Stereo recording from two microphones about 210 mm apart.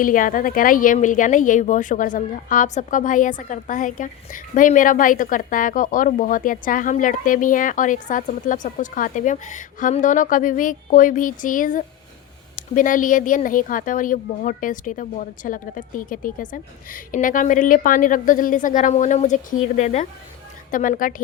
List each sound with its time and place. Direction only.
0.0 s a woman's voice: 40° left (ahead or behind)